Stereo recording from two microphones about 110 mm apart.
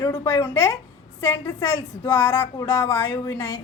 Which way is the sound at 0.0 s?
35° left (ahead or behind).